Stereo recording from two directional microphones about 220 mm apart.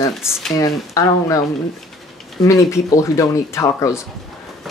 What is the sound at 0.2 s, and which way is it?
Speech, 10° left (ahead or behind).